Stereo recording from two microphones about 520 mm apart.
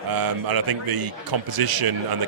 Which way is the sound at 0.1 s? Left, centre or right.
Right.